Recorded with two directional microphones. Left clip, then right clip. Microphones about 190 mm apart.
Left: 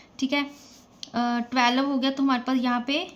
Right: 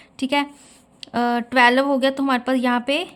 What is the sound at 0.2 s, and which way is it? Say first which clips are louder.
Speech: right 5 dB; 35° right (ahead or behind).